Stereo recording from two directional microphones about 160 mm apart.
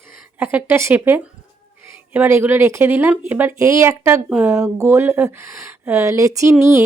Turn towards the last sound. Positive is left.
turn(degrees=-20)  # may be behind; listen again after turning